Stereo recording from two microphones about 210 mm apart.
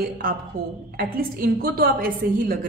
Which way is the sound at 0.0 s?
45° right (ahead or behind).